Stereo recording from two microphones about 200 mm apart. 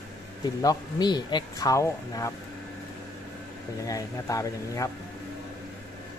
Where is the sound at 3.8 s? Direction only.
15° left (ahead or behind).